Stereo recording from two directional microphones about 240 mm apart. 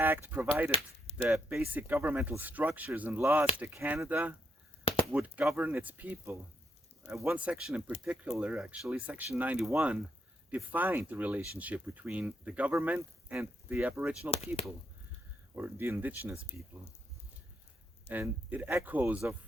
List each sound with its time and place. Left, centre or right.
0.0 s speech: centre
14.3 s speech: left
15.5 s speech: centre
18.1 s speech: centre